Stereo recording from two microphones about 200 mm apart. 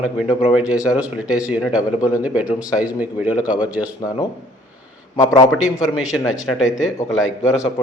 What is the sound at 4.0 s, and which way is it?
Speech, 20° left (ahead or behind).